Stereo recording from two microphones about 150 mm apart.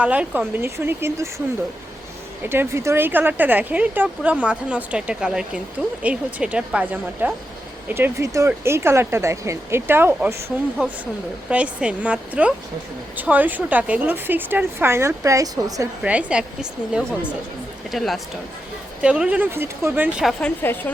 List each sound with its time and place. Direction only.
0.0 s speech: 10° right (ahead or behind)
2.4 s speech: 15° right (ahead or behind)
16.0 s speech: 10° right (ahead or behind)
20.6 s a woman's voice: 15° left (ahead or behind)